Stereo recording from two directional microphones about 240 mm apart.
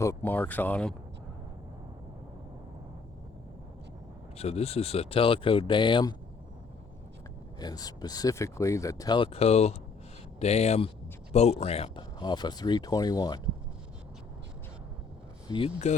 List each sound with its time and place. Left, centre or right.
0.0 s speech: centre
4.4 s speech: left
7.6 s speech: centre
15.4 s speech: left